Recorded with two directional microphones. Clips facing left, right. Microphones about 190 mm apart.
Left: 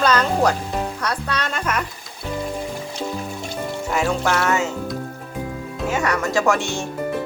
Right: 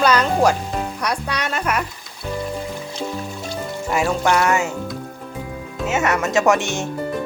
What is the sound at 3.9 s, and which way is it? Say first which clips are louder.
Speech: right 3 dB; 10° right (ahead or behind).